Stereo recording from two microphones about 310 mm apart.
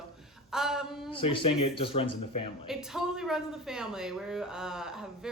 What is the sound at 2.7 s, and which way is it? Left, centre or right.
Speech, centre.